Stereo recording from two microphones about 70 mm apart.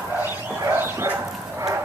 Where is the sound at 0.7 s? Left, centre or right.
Right.